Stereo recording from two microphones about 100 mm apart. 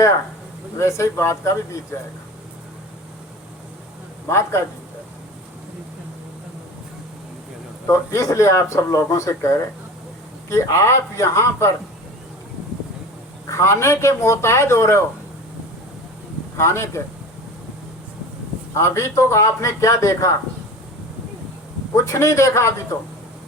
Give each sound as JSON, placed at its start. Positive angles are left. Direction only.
{"t": 0.8, "sound": "a man's voice", "side_deg": 30}
{"t": 4.3, "sound": "a man's voice", "side_deg": 25}
{"t": 7.9, "sound": "a man's voice", "side_deg": 35}
{"t": 13.5, "sound": "a man's voice", "side_deg": 30}
{"t": 16.6, "sound": "a man's voice", "side_deg": 25}
{"t": 18.7, "sound": "a man's voice", "side_deg": 30}
{"t": 21.9, "sound": "a man's voice", "side_deg": 30}